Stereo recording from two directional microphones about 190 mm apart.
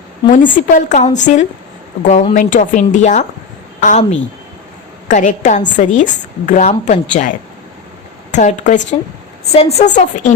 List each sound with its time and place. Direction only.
0.3 s a woman's voice: 45° left (ahead or behind)